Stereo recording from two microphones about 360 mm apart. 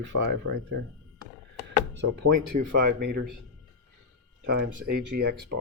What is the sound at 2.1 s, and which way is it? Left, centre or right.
Speech, right.